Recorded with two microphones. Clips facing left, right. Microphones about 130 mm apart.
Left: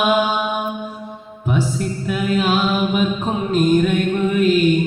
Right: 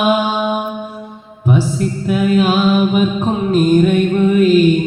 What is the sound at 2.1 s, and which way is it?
Mantra, centre (ahead or behind).